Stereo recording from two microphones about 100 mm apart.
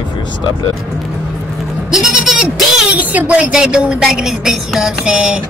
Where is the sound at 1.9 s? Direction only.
5° right (ahead or behind).